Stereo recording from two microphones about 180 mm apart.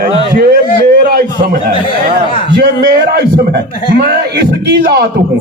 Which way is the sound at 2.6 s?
65° right (ahead or behind).